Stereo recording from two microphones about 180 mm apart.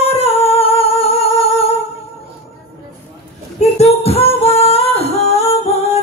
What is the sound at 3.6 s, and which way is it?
Singing, 35° left (ahead or behind).